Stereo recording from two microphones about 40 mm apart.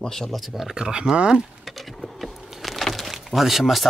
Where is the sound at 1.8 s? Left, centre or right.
Centre.